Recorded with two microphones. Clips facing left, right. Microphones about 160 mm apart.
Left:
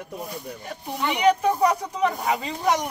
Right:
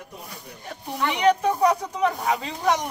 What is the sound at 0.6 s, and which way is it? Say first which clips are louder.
Speech: right 1 dB; centre (ahead or behind).